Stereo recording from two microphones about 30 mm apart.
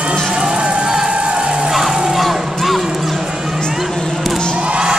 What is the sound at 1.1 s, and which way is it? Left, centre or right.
Music, right.